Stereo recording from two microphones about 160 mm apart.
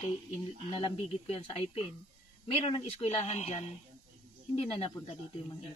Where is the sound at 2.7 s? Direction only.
35° left (ahead or behind).